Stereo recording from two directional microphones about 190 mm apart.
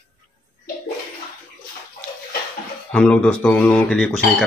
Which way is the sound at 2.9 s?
5° left (ahead or behind).